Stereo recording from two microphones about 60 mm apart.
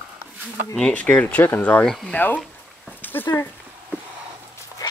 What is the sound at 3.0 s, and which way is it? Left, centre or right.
Dog, left.